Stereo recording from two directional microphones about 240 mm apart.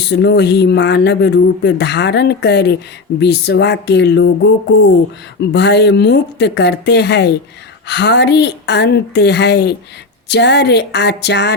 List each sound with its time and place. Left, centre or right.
0.0 s speech: left